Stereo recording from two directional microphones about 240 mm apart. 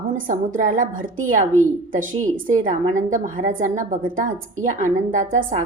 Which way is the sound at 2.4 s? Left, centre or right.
Right.